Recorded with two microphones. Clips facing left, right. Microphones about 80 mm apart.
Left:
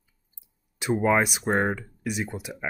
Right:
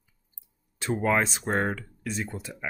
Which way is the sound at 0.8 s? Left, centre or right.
Centre.